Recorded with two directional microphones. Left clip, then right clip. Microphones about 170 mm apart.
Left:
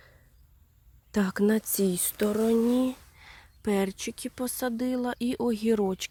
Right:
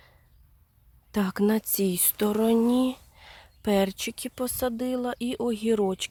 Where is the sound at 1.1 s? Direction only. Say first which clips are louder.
Even; 5° right (ahead or behind).